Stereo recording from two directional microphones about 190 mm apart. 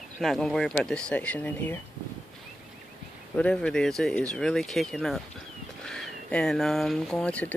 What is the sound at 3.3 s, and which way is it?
Speech, 5° left (ahead or behind).